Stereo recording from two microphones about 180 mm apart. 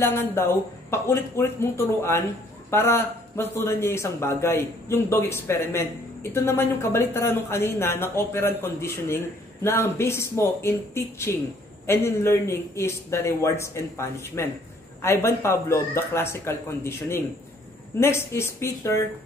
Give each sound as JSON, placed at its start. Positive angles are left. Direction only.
{"t": 0.0, "sound": "speech", "side_deg": 15}